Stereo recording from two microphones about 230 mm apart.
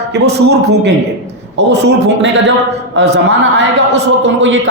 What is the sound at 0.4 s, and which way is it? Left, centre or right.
A man's voice, right.